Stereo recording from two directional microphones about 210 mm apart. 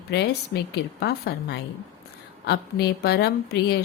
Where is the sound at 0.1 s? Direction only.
50° left (ahead or behind).